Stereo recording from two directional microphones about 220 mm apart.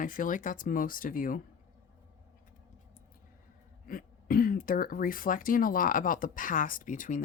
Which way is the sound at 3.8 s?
40° left (ahead or behind).